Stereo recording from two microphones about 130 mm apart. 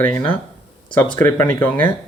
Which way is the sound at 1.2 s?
15° left (ahead or behind).